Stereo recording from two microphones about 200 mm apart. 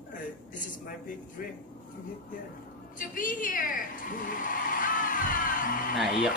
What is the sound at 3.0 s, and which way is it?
Speech, 40° left (ahead or behind).